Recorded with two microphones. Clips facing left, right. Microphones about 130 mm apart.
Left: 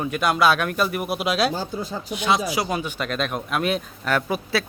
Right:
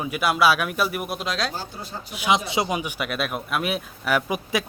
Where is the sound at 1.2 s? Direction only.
10° left (ahead or behind).